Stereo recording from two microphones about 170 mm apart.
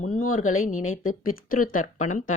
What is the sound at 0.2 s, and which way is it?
A woman's voice, 50° left (ahead or behind).